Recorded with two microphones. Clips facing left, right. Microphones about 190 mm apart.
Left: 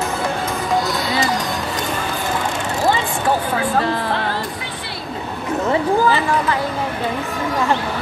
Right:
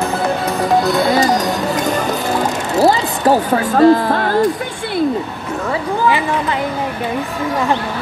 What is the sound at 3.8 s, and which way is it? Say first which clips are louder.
Speech: right 9 dB; 40° right (ahead or behind).